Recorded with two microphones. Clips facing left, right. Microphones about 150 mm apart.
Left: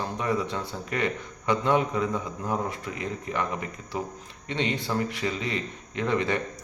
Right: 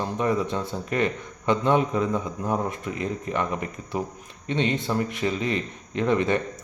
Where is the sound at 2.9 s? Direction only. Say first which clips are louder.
Right 4 dB; 20° left (ahead or behind).